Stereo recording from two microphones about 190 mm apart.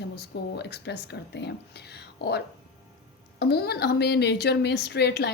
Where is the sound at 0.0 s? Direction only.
60° left (ahead or behind).